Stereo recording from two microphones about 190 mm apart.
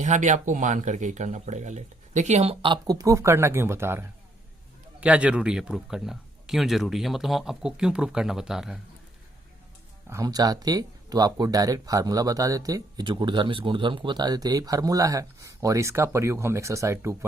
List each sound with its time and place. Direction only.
0.0 s a man's voice: 40° right (ahead or behind); by 8.8 s 5° right (ahead or behind)
10.1 s speech: 15° right (ahead or behind)